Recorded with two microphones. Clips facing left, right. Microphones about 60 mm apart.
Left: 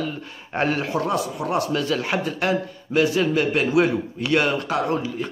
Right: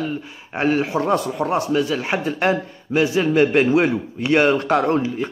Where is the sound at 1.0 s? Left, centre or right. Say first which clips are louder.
Right 4 dB; right.